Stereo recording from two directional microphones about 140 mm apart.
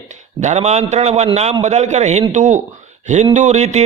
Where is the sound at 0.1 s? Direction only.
55° right (ahead or behind).